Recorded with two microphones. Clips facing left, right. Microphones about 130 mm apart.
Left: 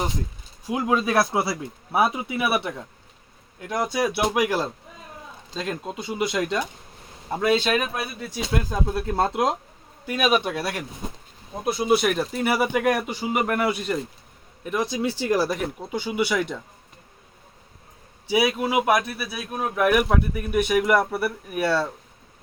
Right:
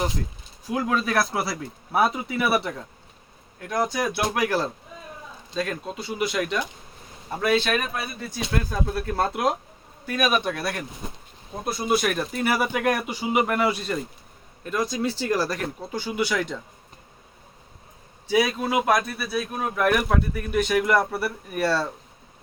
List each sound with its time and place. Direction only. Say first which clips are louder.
0.7 s speech: left 2 dB; 20° left (ahead or behind)
1.9 s speech: even; 5° left (ahead or behind)
3.6 s speech: left 1 dB; 20° left (ahead or behind)
13.1 s speech: right 2 dB; 10° right (ahead or behind)
13.7 s speech: left 1 dB; 15° left (ahead or behind)
18.3 s speech: even; 10° left (ahead or behind)